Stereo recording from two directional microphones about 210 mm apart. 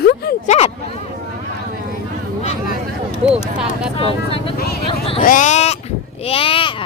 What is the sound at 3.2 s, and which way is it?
Speech, 5° right (ahead or behind).